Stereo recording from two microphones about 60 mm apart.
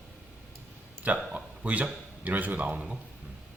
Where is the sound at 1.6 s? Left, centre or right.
Right.